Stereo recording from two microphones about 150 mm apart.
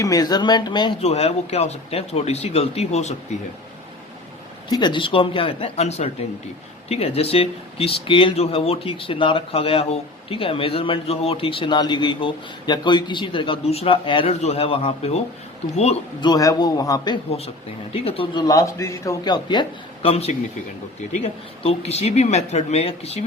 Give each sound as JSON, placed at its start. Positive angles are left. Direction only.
{"t": 0.0, "sound": "a man's voice", "side_deg": 25}
{"t": 1.0, "sound": "speech", "side_deg": 45}
{"t": 4.7, "sound": "a man's voice", "side_deg": 30}
{"t": 16.2, "sound": "a man's voice", "side_deg": 25}
{"t": 17.9, "sound": "a man's voice", "side_deg": 40}
{"t": 18.4, "sound": "a man's voice", "side_deg": 20}
{"t": 21.6, "sound": "speech", "side_deg": 45}